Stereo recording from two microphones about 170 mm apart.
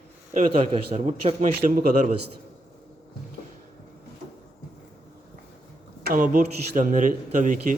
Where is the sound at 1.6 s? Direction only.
55° right (ahead or behind).